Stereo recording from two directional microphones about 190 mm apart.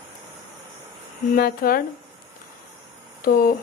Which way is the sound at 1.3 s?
50° left (ahead or behind).